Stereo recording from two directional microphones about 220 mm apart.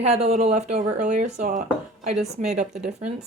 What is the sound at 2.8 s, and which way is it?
Speech, 30° right (ahead or behind).